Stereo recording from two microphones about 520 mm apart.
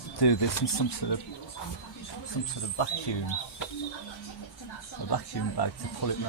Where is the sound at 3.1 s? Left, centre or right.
Left.